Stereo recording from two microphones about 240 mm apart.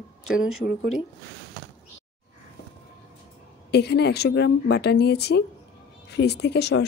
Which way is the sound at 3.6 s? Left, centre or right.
Left.